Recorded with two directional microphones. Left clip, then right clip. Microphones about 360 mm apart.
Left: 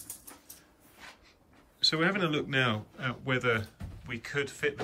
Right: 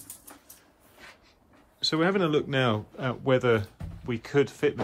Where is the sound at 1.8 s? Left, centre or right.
Centre.